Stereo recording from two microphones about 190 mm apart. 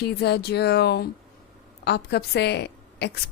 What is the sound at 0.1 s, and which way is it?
Speech, 60° left (ahead or behind).